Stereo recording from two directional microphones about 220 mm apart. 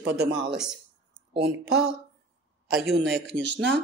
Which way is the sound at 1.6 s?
5° right (ahead or behind).